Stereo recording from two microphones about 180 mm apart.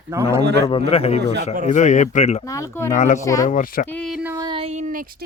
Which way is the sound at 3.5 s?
45° left (ahead or behind).